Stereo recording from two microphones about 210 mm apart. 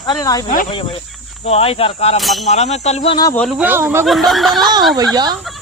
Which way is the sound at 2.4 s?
30° left (ahead or behind).